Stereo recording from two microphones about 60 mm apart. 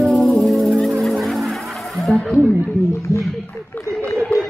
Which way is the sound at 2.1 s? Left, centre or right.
Left.